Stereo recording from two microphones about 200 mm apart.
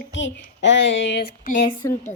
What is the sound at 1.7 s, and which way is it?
Speech, 15° left (ahead or behind).